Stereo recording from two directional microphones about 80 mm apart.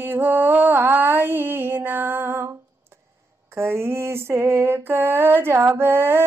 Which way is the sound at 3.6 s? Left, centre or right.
Right.